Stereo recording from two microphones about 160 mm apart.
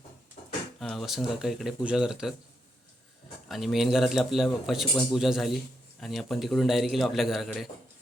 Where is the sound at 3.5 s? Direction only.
Centre (ahead or behind).